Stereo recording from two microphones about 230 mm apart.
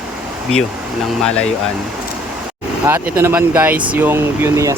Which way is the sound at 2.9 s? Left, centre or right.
Centre.